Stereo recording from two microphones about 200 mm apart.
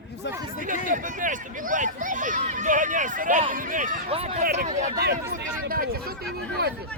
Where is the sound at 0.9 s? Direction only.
40° right (ahead or behind).